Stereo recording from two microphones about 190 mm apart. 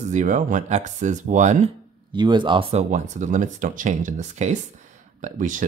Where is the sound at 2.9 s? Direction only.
40° right (ahead or behind).